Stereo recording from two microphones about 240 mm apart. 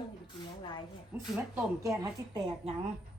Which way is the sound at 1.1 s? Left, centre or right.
Centre.